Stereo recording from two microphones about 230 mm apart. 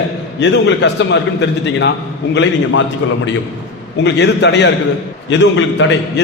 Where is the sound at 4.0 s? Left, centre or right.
Left.